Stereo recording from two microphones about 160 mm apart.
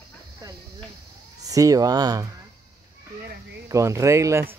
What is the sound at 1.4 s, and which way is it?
Speech, 20° right (ahead or behind).